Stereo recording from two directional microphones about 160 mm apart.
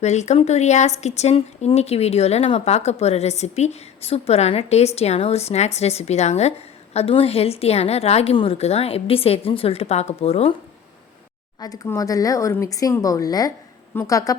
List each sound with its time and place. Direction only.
0.0 s a woman's voice: 45° left (ahead or behind)
11.6 s speech: 20° left (ahead or behind)